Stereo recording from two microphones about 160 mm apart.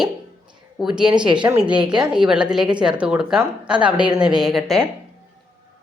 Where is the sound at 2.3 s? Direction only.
5° right (ahead or behind).